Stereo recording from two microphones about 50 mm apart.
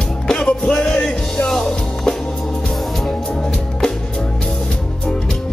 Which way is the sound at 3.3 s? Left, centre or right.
Centre.